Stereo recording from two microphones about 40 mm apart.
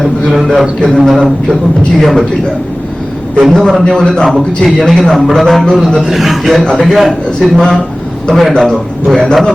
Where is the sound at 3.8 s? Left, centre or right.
Left.